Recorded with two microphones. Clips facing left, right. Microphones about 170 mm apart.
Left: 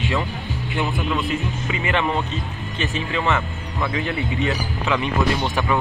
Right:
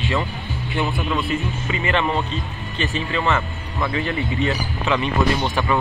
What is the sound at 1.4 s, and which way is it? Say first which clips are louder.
Speech: right 1 dB; 15° left (ahead or behind).